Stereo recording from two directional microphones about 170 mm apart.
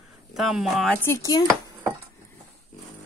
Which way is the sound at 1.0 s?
15° left (ahead or behind).